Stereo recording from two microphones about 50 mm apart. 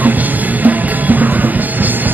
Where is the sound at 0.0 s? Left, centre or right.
Right.